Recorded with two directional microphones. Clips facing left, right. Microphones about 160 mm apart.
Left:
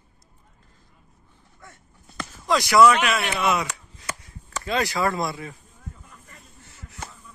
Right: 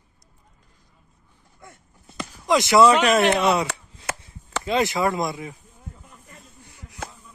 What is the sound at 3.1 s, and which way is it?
Speech, 45° right (ahead or behind).